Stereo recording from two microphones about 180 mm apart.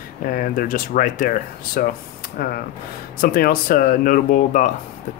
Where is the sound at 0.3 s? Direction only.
50° left (ahead or behind).